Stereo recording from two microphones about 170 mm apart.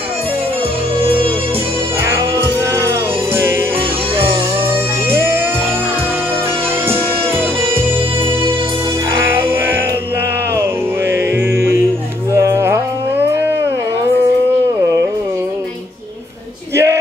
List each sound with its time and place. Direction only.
2.0 s music: 15° right (ahead or behind)
5.1 s music: 15° right (ahead or behind)
12.4 s music: 15° right (ahead or behind)
16.7 s a sound: 15° right (ahead or behind)